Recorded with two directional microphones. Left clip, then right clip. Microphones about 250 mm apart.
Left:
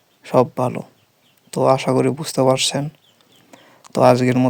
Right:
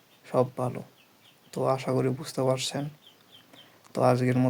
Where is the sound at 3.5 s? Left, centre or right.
Left.